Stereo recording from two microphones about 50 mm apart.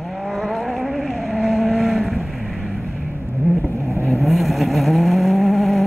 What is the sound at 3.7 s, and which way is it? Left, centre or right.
Vehicle, right.